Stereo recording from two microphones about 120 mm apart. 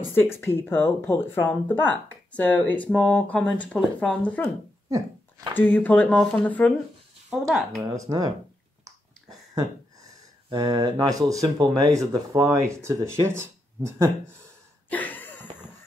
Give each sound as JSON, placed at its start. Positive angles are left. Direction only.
{"t": 0.4, "sound": "speech", "side_deg": 20}
{"t": 4.8, "sound": "dog", "side_deg": -30}
{"t": 5.6, "sound": "speech", "side_deg": 15}
{"t": 7.2, "sound": "speech", "side_deg": 0}
{"t": 7.9, "sound": "speech", "side_deg": -30}
{"t": 10.6, "sound": "speech", "side_deg": -35}
{"t": 14.9, "sound": "a sound", "side_deg": 15}